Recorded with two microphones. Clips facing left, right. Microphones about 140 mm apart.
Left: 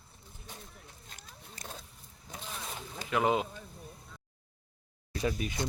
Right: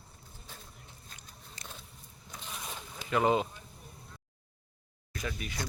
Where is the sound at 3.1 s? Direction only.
Centre (ahead or behind).